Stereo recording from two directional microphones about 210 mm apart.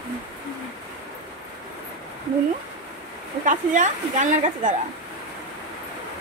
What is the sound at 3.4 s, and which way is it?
A woman's voice, 35° right (ahead or behind).